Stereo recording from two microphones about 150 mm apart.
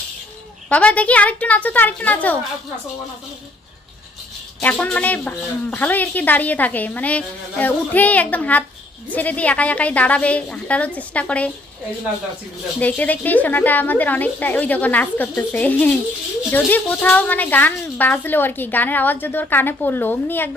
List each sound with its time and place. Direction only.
0.7 s a woman's voice: 10° left (ahead or behind)
4.6 s a woman's voice: 10° left (ahead or behind)
12.8 s a woman's voice: 10° left (ahead or behind)